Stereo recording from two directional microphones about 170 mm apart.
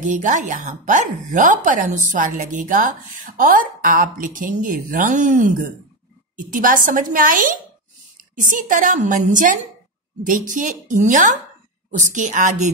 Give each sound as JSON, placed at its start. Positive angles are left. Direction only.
{"t": 0.0, "sound": "a woman's voice", "side_deg": -45}